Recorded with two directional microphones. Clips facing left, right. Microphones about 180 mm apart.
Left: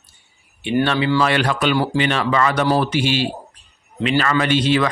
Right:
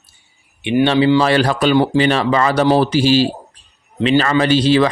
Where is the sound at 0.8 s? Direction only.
25° right (ahead or behind).